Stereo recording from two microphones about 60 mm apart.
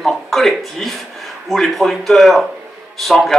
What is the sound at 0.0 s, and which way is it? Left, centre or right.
A man's voice, centre.